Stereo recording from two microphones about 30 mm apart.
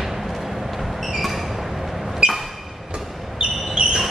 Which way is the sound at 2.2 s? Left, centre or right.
Right.